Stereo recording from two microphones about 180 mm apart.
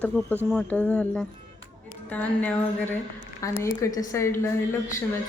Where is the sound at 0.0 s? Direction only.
10° left (ahead or behind).